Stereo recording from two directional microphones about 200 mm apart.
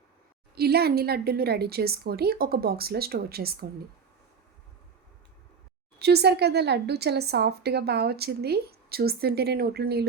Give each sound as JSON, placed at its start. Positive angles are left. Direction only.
{"t": 0.5, "sound": "speech", "side_deg": -50}
{"t": 6.0, "sound": "speech", "side_deg": -55}